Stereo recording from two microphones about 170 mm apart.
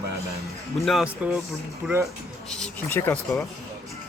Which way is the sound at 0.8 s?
Centre (ahead or behind).